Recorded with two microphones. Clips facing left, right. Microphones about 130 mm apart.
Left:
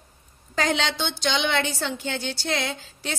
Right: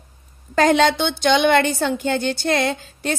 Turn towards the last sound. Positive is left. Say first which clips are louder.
# right 8 dB
turn(degrees=-55)  # may be behind; listen again after turning